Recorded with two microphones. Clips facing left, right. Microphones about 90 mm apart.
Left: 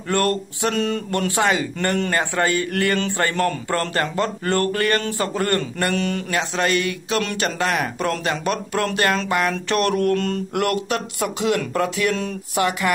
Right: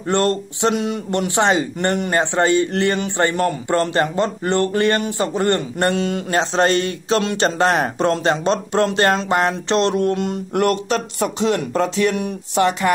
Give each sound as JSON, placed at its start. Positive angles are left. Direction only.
{"t": 0.1, "sound": "speech", "side_deg": -25}
{"t": 10.5, "sound": "speech", "side_deg": -30}